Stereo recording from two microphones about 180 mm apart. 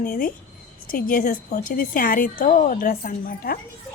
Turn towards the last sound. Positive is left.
turn(degrees=55)  # may be behind; listen again after turning